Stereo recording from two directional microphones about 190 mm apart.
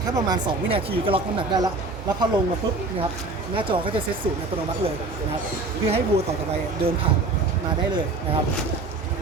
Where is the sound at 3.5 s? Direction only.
25° right (ahead or behind).